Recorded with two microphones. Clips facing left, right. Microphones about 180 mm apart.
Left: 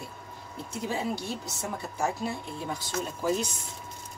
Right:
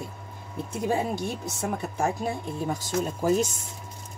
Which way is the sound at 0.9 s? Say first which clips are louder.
Right 4 dB; 50° right (ahead or behind).